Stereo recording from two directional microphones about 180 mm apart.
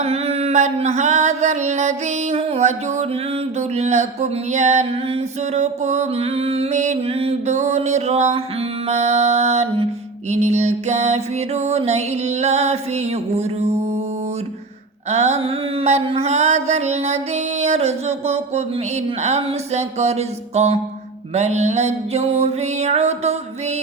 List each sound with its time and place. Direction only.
0.0 s mantra: 35° right (ahead or behind)
15.1 s mantra: 40° right (ahead or behind)